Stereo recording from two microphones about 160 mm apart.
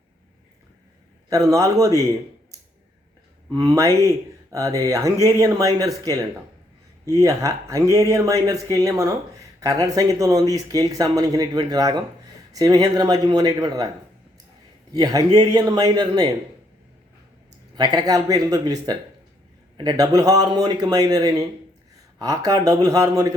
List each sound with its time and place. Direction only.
1.3 s speech: 20° right (ahead or behind)
3.5 s speech: 20° right (ahead or behind)
14.9 s speech: 20° right (ahead or behind)
17.7 s speech: 25° right (ahead or behind)